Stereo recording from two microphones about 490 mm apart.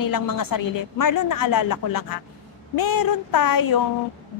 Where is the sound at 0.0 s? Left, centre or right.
Left.